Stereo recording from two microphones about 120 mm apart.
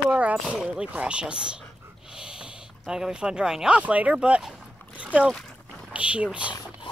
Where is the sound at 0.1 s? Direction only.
10° right (ahead or behind).